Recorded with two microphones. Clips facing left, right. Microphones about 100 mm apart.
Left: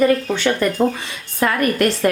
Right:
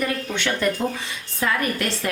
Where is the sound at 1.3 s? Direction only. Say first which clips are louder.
Left 6 dB; 55° left (ahead or behind).